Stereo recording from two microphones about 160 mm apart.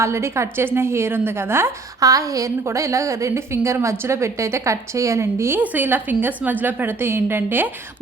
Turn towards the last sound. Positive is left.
turn(degrees=-15)  # may be behind; listen again after turning